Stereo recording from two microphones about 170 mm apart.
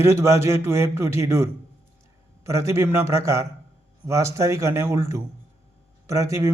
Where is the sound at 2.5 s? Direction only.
15° right (ahead or behind).